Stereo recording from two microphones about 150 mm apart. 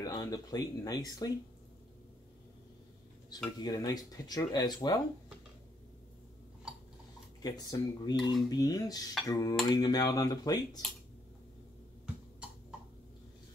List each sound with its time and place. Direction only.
0.0 s speech: 25° left (ahead or behind)
3.5 s speech: 25° left (ahead or behind)
7.4 s speech: 25° left (ahead or behind)